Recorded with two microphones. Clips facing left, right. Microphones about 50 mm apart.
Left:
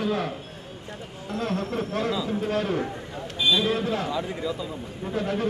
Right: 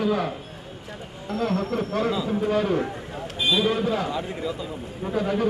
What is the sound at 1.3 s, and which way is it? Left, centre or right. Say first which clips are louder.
Speech: right 3 dB; centre.